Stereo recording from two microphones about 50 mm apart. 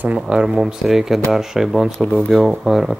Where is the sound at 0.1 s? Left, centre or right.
Centre.